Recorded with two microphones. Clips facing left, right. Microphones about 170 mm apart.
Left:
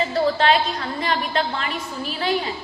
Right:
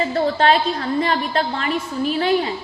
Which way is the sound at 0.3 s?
35° right (ahead or behind).